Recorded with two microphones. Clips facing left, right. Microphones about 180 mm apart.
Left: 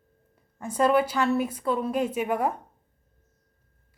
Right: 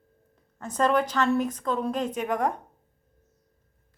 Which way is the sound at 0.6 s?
10° left (ahead or behind).